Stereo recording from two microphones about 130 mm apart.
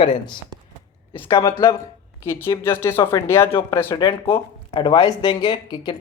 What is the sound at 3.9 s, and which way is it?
Speech, 30° left (ahead or behind).